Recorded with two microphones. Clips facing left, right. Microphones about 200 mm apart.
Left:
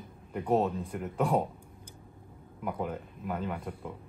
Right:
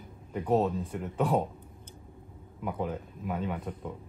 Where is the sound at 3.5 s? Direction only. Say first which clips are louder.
Right 1 dB; 10° left (ahead or behind).